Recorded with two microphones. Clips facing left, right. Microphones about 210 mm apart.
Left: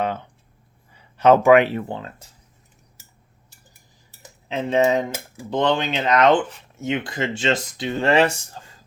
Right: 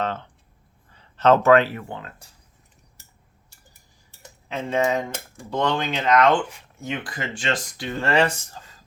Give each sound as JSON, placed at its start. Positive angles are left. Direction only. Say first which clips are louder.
{"t": 0.0, "sound": "speech", "louder": "left 2 dB", "side_deg": 10}
{"t": 1.7, "sound": "speech", "louder": "left 6 dB", "side_deg": 30}
{"t": 4.4, "sound": "speech", "louder": "left 4 dB", "side_deg": 20}